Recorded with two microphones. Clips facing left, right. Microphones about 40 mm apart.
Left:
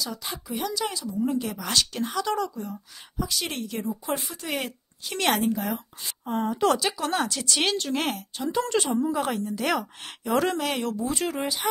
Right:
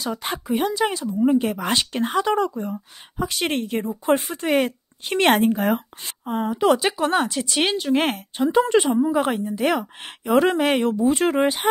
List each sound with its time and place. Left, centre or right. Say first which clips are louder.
0.0 s a woman's voice: right 6 dB; right
6.2 s a woman's voice: right 4 dB; centre
7.9 s a woman's voice: right 7 dB; right